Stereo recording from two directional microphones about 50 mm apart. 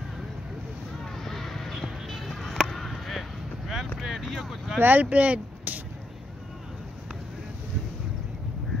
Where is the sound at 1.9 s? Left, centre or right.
Centre.